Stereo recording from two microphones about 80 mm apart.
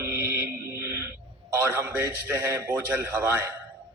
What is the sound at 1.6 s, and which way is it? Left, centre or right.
A man's voice, right.